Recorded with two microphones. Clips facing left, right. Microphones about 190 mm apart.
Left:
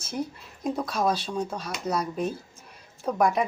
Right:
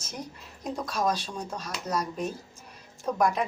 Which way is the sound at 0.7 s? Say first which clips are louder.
Left 1 dB; 10° left (ahead or behind).